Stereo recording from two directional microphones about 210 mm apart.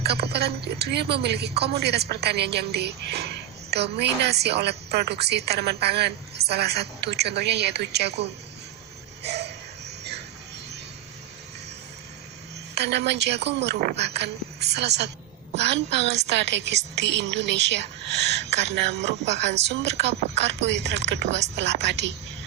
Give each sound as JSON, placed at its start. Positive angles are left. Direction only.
{"t": 0.0, "sound": "a woman's voice", "side_deg": -50}
{"t": 9.2, "sound": "a sound", "side_deg": -50}
{"t": 12.7, "sound": "a woman's voice", "side_deg": -50}